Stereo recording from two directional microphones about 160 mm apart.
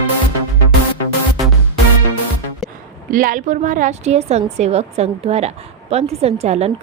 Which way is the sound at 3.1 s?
60° right (ahead or behind).